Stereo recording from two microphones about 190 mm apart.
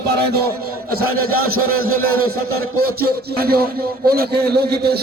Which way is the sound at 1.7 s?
90° right.